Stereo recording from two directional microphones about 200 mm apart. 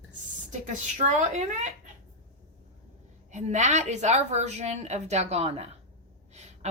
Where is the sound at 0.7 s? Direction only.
40° right (ahead or behind).